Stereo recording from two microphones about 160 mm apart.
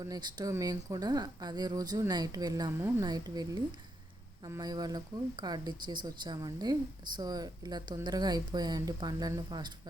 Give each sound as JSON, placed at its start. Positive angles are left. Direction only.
{"t": 0.0, "sound": "a woman's voice", "side_deg": -25}